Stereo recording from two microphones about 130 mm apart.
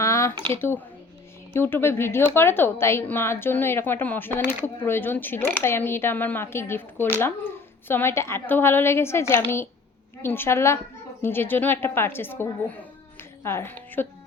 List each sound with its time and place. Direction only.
0.0 s a sound: 25° left (ahead or behind)
0.5 s a woman's voice: 15° left (ahead or behind)
13.1 s music: 20° left (ahead or behind)